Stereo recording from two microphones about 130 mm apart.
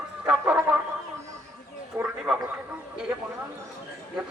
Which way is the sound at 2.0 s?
20° right (ahead or behind).